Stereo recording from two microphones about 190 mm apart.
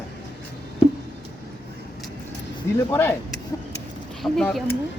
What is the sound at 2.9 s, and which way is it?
Speech, 10° left (ahead or behind).